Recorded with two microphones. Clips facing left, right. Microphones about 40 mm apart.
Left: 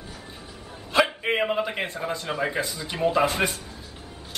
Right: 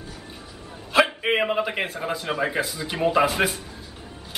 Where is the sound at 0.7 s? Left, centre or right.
Centre.